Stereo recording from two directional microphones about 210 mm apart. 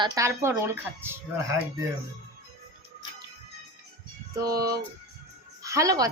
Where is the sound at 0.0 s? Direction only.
15° right (ahead or behind).